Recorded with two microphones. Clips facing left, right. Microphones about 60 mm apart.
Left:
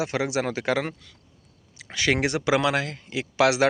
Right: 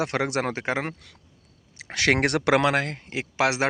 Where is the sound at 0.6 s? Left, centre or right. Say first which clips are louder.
Left 2 dB; right.